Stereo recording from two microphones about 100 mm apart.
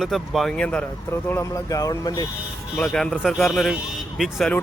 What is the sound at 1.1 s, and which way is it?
Speech, 25° left (ahead or behind).